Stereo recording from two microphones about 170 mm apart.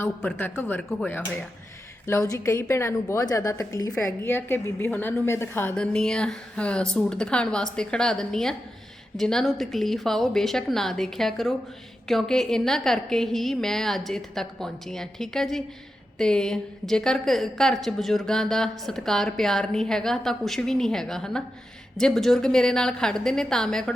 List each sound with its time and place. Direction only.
0.0 s a woman's voice: 10° left (ahead or behind)
3.9 s a woman's voice: 10° left (ahead or behind)